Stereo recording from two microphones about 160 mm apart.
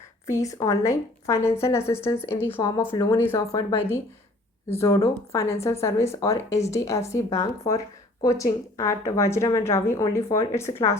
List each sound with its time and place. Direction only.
0.3 s a woman's voice: 20° left (ahead or behind)